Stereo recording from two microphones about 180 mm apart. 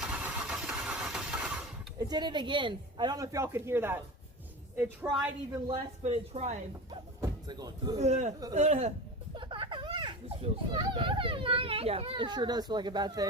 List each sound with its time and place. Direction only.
0.0 s vehicle: 5° right (ahead or behind)
2.0 s speech: 25° right (ahead or behind)
5.0 s speech: 10° right (ahead or behind)
5.5 s speech: 25° right (ahead or behind)
6.0 s speech: 35° right (ahead or behind)
7.2 s speech: 20° right (ahead or behind)
7.9 s speech: 40° right (ahead or behind)
9.3 s a child's voice: 25° right (ahead or behind)